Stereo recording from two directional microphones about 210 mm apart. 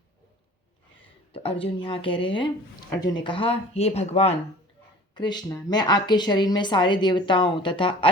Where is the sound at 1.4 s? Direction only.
25° left (ahead or behind).